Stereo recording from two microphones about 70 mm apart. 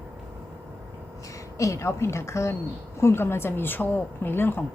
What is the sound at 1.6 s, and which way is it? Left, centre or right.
A woman's voice, left.